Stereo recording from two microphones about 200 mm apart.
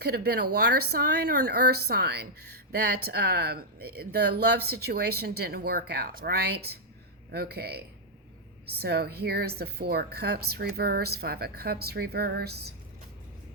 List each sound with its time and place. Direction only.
0.0 s speech: 50° right (ahead or behind)